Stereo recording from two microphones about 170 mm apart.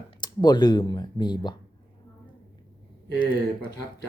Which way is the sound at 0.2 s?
25° left (ahead or behind).